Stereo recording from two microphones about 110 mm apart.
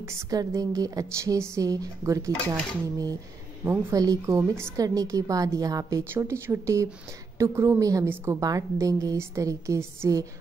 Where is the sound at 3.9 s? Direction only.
30° right (ahead or behind).